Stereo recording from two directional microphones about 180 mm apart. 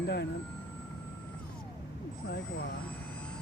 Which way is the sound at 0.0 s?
70° left (ahead or behind).